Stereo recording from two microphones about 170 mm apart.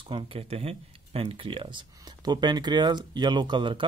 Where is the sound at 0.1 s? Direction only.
35° right (ahead or behind).